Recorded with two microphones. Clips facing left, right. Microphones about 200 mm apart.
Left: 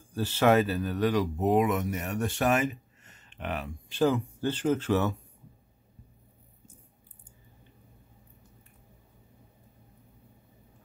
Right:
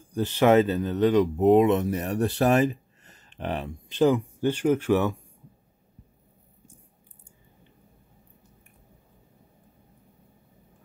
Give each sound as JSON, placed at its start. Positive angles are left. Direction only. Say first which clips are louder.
{"t": 0.1, "sound": "speech", "louder": "right 4 dB", "side_deg": -20}